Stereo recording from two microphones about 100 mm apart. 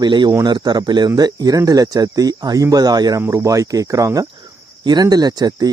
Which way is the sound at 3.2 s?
30° right (ahead or behind).